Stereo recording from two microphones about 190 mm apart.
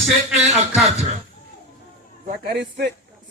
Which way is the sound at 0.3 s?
35° right (ahead or behind).